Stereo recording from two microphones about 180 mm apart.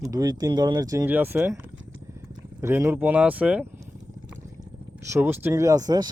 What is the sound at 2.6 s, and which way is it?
Speech, 15° right (ahead or behind).